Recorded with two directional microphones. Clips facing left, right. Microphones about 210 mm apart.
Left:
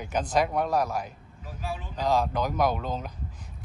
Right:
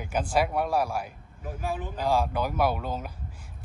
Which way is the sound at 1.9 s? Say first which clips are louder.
Left 2 dB; 10° right (ahead or behind).